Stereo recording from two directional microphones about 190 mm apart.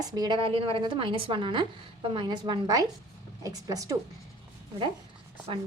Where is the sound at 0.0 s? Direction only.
20° right (ahead or behind).